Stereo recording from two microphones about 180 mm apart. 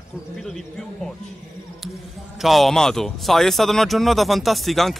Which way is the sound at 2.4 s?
Centre (ahead or behind).